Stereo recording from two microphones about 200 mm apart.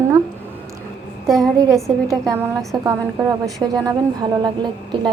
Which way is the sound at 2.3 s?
15° right (ahead or behind).